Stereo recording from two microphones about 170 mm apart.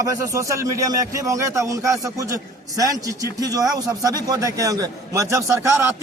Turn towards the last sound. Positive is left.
turn(degrees=-15)  # may be behind; listen again after turning